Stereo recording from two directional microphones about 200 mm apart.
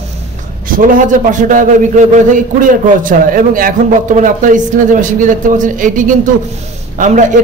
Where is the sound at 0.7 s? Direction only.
45° right (ahead or behind).